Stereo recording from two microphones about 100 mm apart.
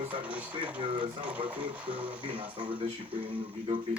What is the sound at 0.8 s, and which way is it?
Speech, 60° right (ahead or behind).